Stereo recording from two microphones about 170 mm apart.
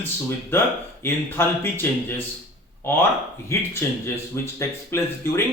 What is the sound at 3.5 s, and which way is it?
Speech, 15° left (ahead or behind).